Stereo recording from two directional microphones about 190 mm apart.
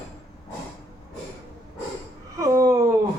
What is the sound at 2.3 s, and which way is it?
Speech, 15° right (ahead or behind).